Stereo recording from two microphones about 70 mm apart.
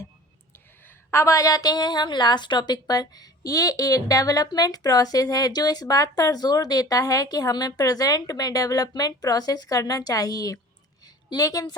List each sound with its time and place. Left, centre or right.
1.1 s a woman's voice: left